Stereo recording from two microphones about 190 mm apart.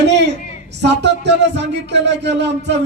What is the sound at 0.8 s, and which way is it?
A man's voice, 65° right (ahead or behind).